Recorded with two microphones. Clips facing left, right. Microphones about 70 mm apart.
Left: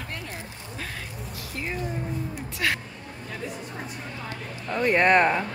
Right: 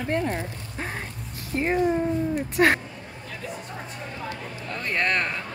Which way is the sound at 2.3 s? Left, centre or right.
Right.